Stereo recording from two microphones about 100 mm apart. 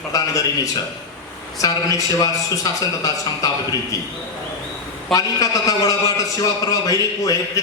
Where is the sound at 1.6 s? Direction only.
40° left (ahead or behind).